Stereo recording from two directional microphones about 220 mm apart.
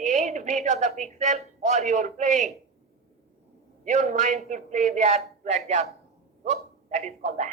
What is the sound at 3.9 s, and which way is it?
A man's voice, 35° right (ahead or behind).